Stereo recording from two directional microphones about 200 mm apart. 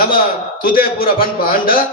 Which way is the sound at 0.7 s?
45° left (ahead or behind).